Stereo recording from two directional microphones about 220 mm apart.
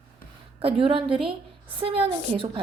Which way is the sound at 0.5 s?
25° right (ahead or behind).